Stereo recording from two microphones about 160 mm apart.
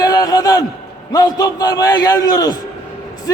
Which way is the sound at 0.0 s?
25° left (ahead or behind).